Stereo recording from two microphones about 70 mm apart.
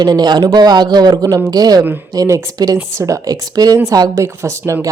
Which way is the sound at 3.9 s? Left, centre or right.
Right.